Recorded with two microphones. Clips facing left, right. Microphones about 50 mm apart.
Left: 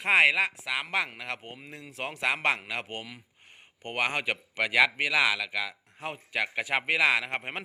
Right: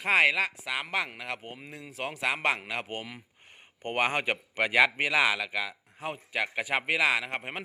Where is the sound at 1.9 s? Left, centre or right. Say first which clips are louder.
Left 1 dB; centre.